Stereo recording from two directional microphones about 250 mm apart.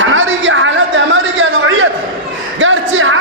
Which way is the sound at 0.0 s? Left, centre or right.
Right.